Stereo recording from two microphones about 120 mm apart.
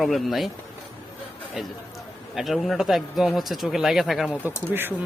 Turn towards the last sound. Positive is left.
turn(degrees=-15)  # may be behind; listen again after turning